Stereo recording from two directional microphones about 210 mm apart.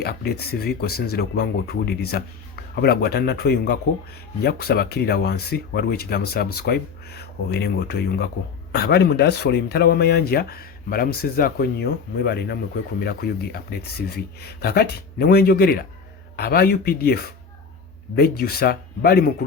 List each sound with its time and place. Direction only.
0.0 s speech: 50° left (ahead or behind)